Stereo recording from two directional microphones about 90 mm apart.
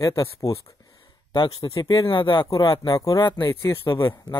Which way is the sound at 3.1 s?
55° left (ahead or behind).